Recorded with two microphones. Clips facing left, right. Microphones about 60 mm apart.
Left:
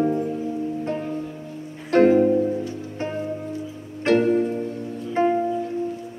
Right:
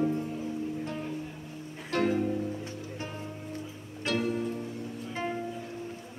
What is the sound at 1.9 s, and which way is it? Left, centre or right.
Music, left.